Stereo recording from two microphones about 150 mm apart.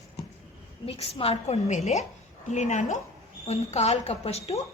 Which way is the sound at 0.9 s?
40° left (ahead or behind).